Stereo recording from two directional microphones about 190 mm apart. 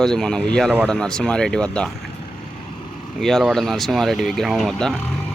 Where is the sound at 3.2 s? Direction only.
Centre (ahead or behind).